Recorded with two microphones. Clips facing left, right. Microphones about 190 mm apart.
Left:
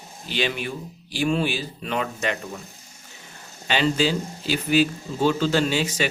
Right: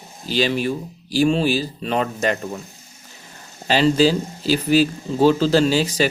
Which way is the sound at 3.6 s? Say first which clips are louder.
Right 6 dB; 35° right (ahead or behind).